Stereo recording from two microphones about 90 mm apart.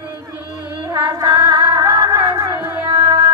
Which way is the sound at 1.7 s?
35° right (ahead or behind).